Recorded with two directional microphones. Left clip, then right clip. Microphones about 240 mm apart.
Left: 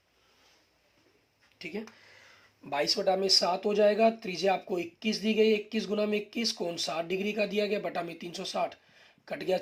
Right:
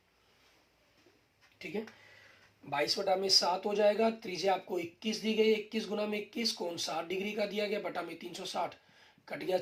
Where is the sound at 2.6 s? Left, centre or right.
Left.